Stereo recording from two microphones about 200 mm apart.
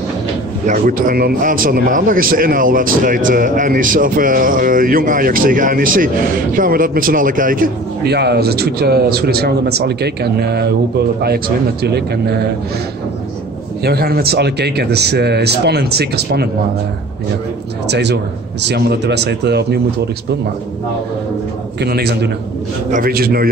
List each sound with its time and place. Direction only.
0.7 s a man's voice: 45° right (ahead or behind)
13.8 s a man's voice: 50° right (ahead or behind)
17.8 s a man's voice: 60° right (ahead or behind)
21.8 s a man's voice: 55° right (ahead or behind)